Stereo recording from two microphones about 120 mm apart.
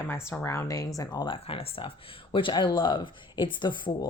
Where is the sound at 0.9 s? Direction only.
35° left (ahead or behind).